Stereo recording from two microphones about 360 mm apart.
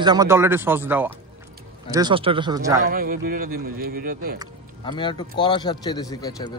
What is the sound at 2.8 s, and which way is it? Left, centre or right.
Speech, right.